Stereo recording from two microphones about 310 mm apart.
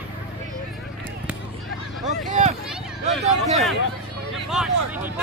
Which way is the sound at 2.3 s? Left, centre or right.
Right.